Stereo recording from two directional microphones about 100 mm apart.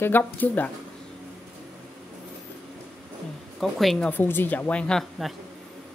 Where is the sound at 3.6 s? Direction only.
Centre (ahead or behind).